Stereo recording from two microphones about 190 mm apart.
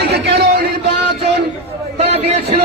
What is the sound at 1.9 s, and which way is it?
Speech, 35° right (ahead or behind).